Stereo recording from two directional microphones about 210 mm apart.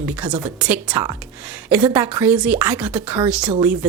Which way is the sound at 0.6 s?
5° right (ahead or behind).